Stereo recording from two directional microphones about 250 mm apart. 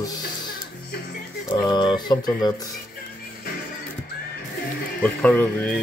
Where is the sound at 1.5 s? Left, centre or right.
Centre.